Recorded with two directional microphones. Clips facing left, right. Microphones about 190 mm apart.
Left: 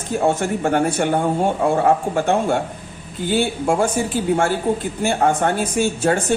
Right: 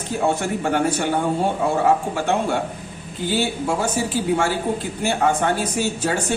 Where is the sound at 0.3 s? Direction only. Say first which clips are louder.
Left 3 dB; 50° left (ahead or behind).